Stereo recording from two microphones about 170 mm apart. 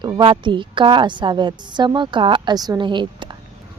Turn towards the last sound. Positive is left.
turn(degrees=-25)  # may be behind; listen again after turning